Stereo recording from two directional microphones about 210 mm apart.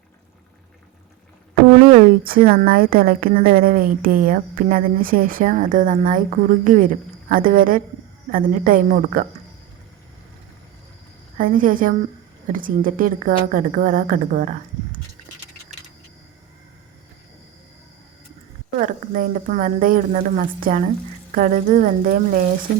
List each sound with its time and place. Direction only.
1.9 s a woman's voice: 40° right (ahead or behind)
11.3 s a woman's voice: 40° right (ahead or behind)
18.8 s a woman's voice: 40° right (ahead or behind)